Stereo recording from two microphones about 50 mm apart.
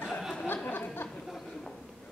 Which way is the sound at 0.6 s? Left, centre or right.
Left.